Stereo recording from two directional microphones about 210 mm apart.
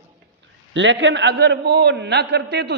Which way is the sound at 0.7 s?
60° right (ahead or behind).